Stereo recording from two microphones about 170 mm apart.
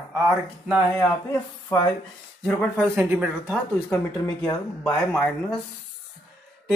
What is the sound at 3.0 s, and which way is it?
Speech, 10° right (ahead or behind).